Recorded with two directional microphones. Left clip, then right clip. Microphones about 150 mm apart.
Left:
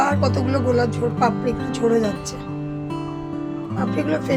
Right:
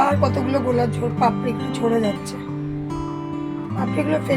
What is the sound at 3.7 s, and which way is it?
Speech, centre (ahead or behind).